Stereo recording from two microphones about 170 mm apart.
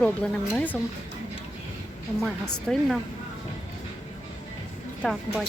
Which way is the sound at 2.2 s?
Centre (ahead or behind).